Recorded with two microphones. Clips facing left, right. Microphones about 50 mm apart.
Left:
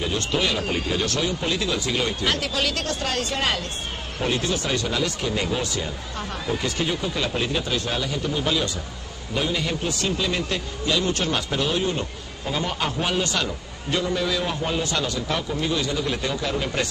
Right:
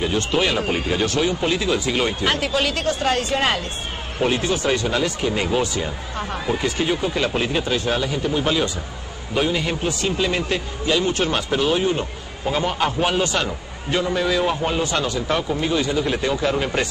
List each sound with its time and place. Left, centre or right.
0.0 s a man's voice: centre